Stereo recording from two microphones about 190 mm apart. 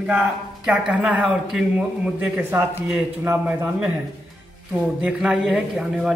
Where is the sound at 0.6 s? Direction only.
5° right (ahead or behind).